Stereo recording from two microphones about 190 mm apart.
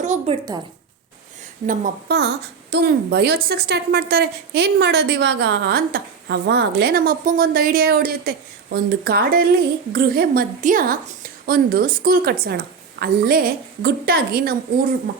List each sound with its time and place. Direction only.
0.0 s speech: 40° right (ahead or behind)
1.6 s a woman's voice: 45° right (ahead or behind)